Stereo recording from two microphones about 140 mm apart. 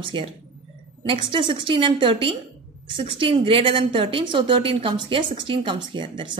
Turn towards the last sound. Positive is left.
turn(degrees=-35)  # may be behind; listen again after turning